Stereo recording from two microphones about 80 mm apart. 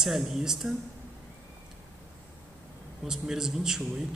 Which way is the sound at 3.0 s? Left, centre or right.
Centre.